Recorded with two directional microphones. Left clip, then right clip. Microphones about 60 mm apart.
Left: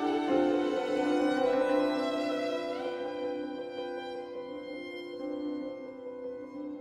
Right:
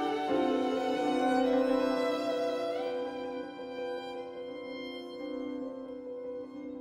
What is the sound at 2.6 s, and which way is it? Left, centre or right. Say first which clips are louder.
Music: right 1 dB; centre.